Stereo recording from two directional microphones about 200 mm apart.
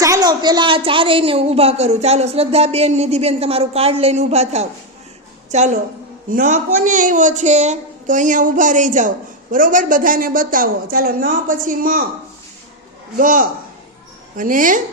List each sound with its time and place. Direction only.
0.0 s a woman's voice: 20° right (ahead or behind); by 12.0 s 45° right (ahead or behind)
13.1 s speech: 40° right (ahead or behind)